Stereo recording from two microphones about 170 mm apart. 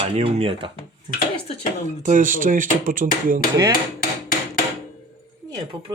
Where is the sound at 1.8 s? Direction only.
50° right (ahead or behind).